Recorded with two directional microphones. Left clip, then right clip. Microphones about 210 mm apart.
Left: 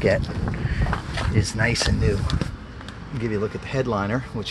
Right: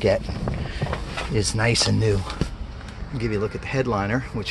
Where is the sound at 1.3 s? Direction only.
30° right (ahead or behind).